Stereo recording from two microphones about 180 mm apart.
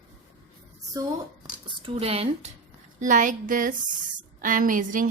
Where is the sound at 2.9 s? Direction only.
45° right (ahead or behind).